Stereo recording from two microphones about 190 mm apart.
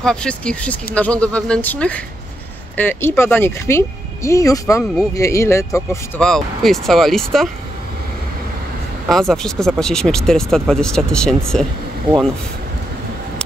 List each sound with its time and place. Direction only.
0.0 s speech: 5° left (ahead or behind)
6.2 s speech: centre (ahead or behind)
9.1 s speech: centre (ahead or behind)